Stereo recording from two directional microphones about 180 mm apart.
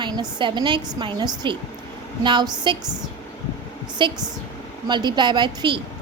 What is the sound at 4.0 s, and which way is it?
A woman's voice, 25° right (ahead or behind).